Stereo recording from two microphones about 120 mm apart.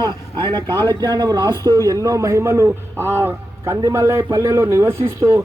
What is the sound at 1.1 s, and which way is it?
A man's voice, 35° right (ahead or behind).